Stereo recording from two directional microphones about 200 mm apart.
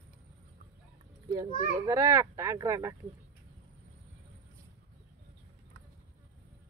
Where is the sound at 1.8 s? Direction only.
15° right (ahead or behind).